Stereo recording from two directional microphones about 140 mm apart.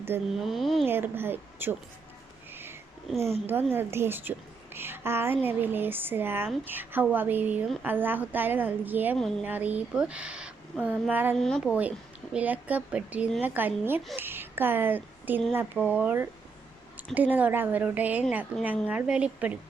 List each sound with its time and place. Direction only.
0.1 s a woman's voice: 15° right (ahead or behind)
0.4 s speech: centre (ahead or behind)
0.9 s a woman's voice: 15° right (ahead or behind)
3.4 s a woman's voice: 15° right (ahead or behind)
11.3 s speech: 5° left (ahead or behind)
11.7 s a woman's voice: 10° right (ahead or behind)